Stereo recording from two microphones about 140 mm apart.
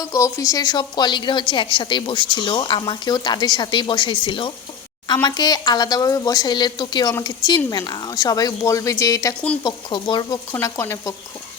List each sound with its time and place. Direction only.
0.0 s a woman's voice: 25° left (ahead or behind)